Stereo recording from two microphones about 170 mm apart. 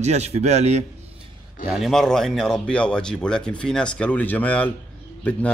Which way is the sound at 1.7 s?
Centre (ahead or behind).